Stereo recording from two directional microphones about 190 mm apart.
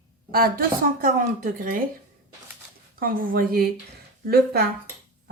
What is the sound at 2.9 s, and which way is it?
Speech, 50° right (ahead or behind).